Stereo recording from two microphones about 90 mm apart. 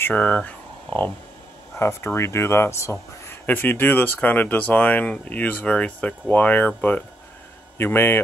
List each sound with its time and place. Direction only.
0.0 s speech: 15° left (ahead or behind)
1.8 s speech: 30° left (ahead or behind)